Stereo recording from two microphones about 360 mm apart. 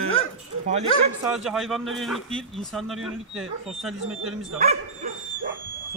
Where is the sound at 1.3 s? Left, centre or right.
Centre.